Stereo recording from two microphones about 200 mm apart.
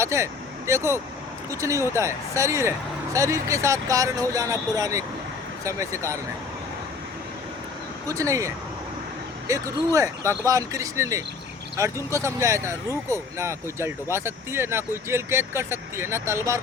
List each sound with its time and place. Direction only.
0.0 s speech: 15° right (ahead or behind)
8.0 s speech: 15° right (ahead or behind)